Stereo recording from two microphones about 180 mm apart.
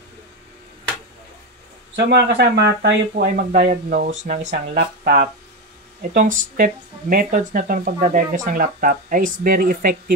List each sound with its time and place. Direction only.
2.0 s speech: 70° right (ahead or behind); by 4.6 s 40° right (ahead or behind)
4.7 s speech: 55° right (ahead or behind)